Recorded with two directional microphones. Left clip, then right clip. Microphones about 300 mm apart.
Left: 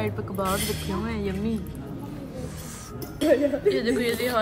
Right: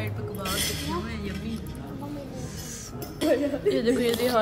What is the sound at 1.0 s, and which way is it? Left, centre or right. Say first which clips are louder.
Speech: left 6 dB; centre.